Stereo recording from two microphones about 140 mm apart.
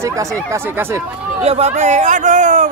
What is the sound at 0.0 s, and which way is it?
Speech, 20° right (ahead or behind).